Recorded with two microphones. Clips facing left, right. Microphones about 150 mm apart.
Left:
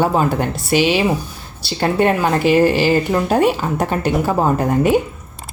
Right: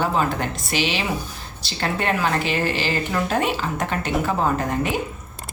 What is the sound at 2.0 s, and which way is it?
Speech, 45° left (ahead or behind).